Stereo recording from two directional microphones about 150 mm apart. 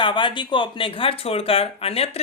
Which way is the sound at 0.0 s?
35° left (ahead or behind).